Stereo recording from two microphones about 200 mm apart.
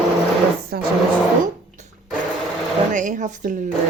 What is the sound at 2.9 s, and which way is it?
Speech, 40° right (ahead or behind).